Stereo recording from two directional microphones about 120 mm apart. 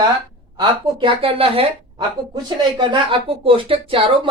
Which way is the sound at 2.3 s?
35° right (ahead or behind).